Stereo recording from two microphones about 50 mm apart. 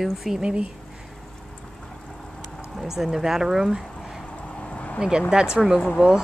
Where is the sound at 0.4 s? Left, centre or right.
Centre.